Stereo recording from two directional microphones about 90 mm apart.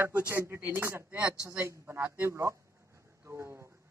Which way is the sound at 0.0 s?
20° right (ahead or behind).